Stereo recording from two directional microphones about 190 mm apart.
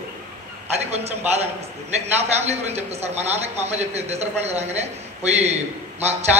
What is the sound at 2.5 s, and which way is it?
A man's voice, 35° right (ahead or behind).